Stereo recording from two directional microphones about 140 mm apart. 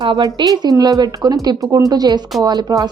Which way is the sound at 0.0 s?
30° right (ahead or behind).